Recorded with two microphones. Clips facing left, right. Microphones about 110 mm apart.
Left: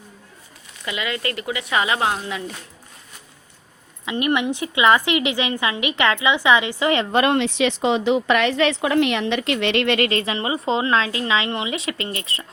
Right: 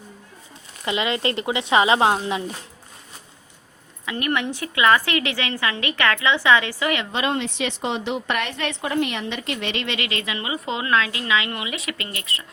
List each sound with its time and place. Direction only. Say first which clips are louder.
0.9 s speech: right 3 dB; 25° right (ahead or behind)
4.0 s a woman's voice: left 3 dB; 20° left (ahead or behind)
7.1 s speech: left 6 dB; 55° left (ahead or behind)
7.3 s a woman's voice: left 6 dB; 90° left; by 10.1 s 55° left (ahead or behind)
10.1 s a woman's voice: left 5 dB; 30° left (ahead or behind)